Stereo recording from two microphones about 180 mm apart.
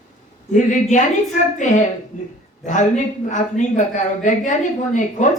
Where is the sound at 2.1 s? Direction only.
45° left (ahead or behind).